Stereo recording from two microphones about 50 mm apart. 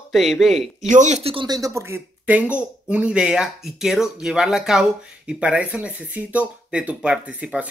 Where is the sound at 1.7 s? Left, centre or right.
Right.